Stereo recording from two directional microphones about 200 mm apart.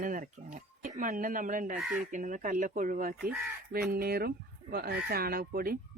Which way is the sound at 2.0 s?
40° right (ahead or behind).